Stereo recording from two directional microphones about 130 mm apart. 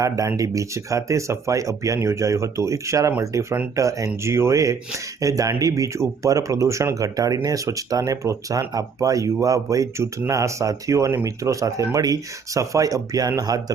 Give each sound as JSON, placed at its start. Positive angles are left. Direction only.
{"t": 0.0, "sound": "speech", "side_deg": -25}